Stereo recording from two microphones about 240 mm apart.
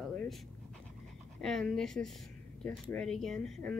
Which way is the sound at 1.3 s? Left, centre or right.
Centre.